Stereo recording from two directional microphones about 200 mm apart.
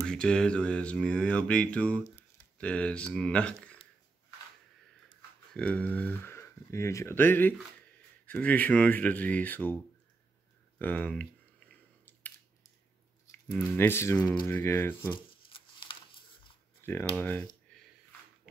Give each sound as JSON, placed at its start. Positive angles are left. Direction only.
{"t": 0.0, "sound": "speech", "side_deg": 5}
{"t": 5.5, "sound": "speech", "side_deg": 5}
{"t": 10.8, "sound": "speech", "side_deg": 5}
{"t": 13.5, "sound": "speech", "side_deg": 10}
{"t": 15.1, "sound": "a sound", "side_deg": 25}
{"t": 16.8, "sound": "speech", "side_deg": 10}